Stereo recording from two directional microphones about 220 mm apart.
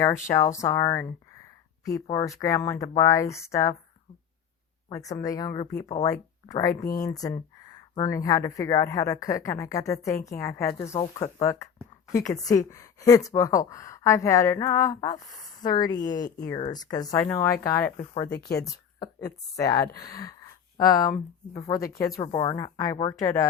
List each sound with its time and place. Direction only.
0.3 s speech: 15° left (ahead or behind)
4.9 s speech: 15° left (ahead or behind)
18.3 s speech: 45° left (ahead or behind)
18.6 s speech: 15° left (ahead or behind)